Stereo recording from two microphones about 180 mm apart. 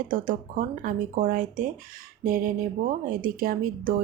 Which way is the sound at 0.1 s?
50° right (ahead or behind).